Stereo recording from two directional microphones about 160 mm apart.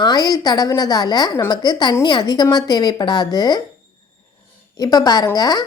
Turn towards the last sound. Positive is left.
turn(degrees=25)  # may be behind; listen again after turning